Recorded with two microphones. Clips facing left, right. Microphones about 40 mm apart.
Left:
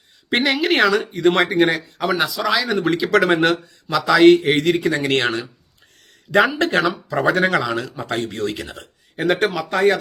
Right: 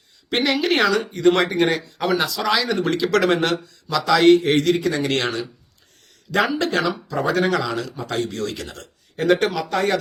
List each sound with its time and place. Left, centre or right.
0.3 s speech: left
4.1 s speech: centre
4.8 s speech: left
6.5 s speech: left
8.6 s speech: centre